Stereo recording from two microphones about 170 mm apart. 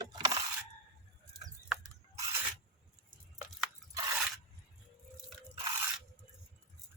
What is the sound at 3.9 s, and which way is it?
Crunch, 20° right (ahead or behind).